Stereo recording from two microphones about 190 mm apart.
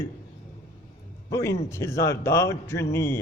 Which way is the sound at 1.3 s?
15° left (ahead or behind).